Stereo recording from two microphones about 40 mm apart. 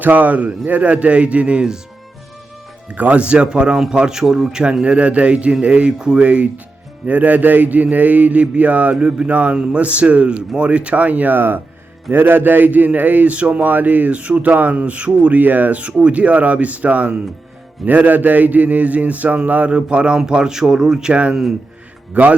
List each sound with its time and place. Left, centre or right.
0.0 s speech: right
2.9 s speech: right; by 4.6 s centre
4.7 s speech: right
11.3 s a man's voice: right; by 21.1 s centre
21.1 s speech: right
22.1 s speech: right